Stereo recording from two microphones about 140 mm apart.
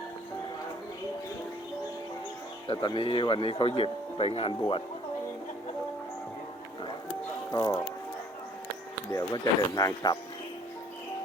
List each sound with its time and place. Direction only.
2.6 s speech: 35° left (ahead or behind)
7.5 s speech: 25° left (ahead or behind)
9.1 s speech: 25° left (ahead or behind)